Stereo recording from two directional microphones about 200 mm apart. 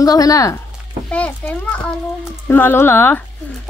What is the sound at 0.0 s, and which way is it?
A woman's voice, 20° left (ahead or behind).